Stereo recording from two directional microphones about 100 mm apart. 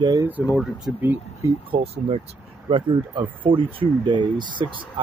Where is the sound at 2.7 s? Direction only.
60° right (ahead or behind).